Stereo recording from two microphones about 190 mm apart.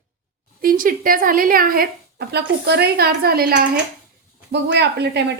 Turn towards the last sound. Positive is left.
turn(degrees=-60)  # may be behind; listen again after turning